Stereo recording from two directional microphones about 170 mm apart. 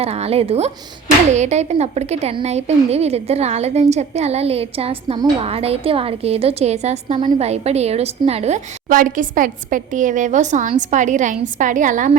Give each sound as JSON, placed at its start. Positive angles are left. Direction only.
{"t": 0.0, "sound": "speech", "side_deg": -40}